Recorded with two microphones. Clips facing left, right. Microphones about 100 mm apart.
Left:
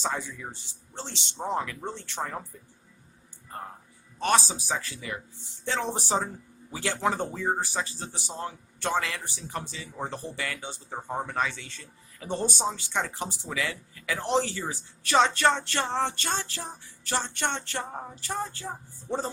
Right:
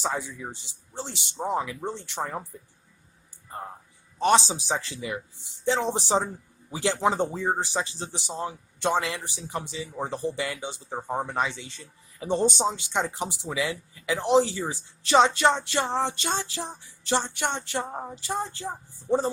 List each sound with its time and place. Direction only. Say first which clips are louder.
0.0 s speech: right 2 dB; 15° right (ahead or behind)
4.2 s speech: right 4 dB; 20° right (ahead or behind)